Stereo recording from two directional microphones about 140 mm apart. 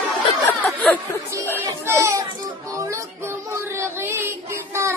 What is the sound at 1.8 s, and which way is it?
Children playing, 20° right (ahead or behind).